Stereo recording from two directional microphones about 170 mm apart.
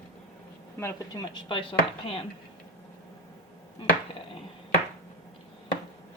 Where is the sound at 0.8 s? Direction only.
15° left (ahead or behind).